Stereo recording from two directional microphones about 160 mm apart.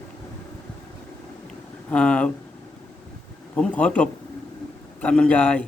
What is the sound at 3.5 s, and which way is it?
A man's voice, 10° left (ahead or behind).